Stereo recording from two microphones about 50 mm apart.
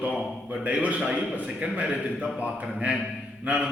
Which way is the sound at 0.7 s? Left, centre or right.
Right.